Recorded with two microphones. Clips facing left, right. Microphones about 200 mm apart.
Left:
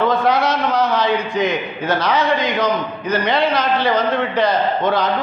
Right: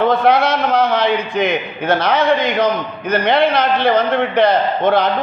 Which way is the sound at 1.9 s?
60° right (ahead or behind).